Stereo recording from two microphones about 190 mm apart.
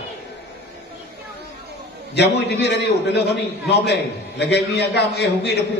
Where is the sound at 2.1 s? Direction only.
65° left (ahead or behind).